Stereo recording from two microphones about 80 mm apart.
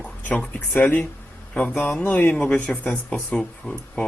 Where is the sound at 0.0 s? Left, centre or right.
Centre.